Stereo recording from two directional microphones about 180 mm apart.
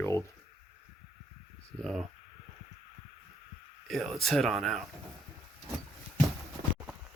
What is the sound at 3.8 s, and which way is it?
Speech, centre (ahead or behind).